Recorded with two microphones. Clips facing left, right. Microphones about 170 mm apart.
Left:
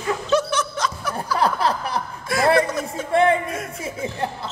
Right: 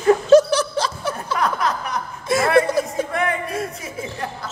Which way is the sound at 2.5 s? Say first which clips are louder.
Right 3 dB; 30° right (ahead or behind).